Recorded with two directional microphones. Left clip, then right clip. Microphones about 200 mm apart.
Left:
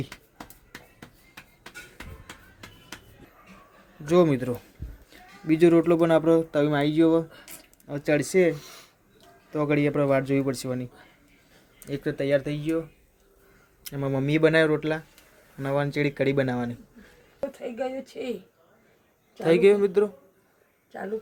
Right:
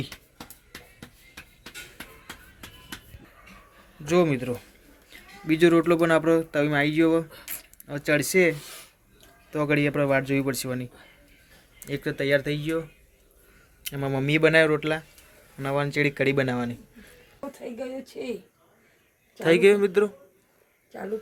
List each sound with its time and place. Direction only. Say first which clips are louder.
0.0 s a sound: right 1 dB; centre (ahead or behind)
4.0 s speech: left 2 dB; 15° left (ahead or behind)
5.1 s music: right 3 dB; 15° left (ahead or behind)
5.5 s speech: even; 10° left (ahead or behind)
13.8 s speech: even; 10° left (ahead or behind)
19.4 s speech: even; 5° left (ahead or behind)